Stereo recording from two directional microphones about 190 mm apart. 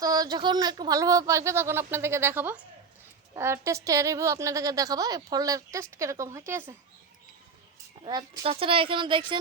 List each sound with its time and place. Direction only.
0.0 s speech: 20° right (ahead or behind)
8.0 s speech: 25° right (ahead or behind)